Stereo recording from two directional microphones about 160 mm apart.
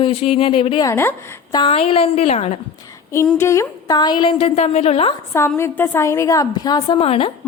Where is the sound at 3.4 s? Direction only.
15° left (ahead or behind); by 5.1 s 40° left (ahead or behind).